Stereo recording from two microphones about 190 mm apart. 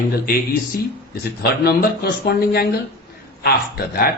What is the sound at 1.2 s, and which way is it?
A man's voice, 55° left (ahead or behind).